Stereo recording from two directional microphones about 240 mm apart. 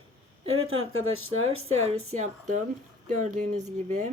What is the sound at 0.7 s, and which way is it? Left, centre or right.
Speech, right.